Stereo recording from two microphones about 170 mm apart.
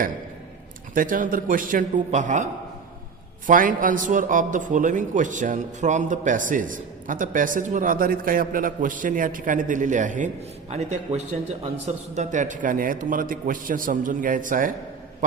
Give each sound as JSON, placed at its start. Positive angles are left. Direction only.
{"t": 0.9, "sound": "a man's voice", "side_deg": -55}